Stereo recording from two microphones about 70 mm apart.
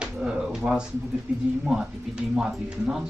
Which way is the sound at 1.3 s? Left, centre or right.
Centre.